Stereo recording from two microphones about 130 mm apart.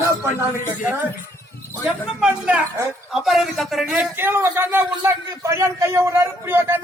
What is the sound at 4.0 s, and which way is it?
A man's voice, 15° right (ahead or behind).